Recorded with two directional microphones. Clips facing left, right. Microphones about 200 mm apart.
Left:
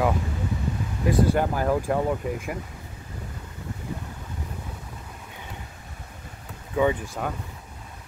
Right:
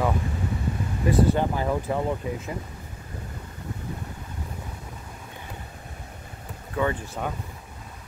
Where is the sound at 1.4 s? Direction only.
5° left (ahead or behind).